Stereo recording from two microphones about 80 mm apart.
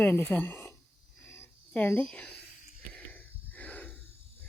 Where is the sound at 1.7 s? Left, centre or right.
Centre.